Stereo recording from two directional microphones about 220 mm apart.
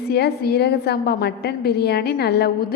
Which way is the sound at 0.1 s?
45° left (ahead or behind).